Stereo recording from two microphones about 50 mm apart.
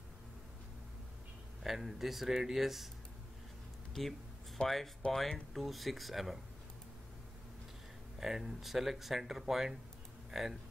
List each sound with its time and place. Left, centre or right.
1.6 s speech: centre
4.6 s speech: left; by 6.4 s centre
8.2 s speech: centre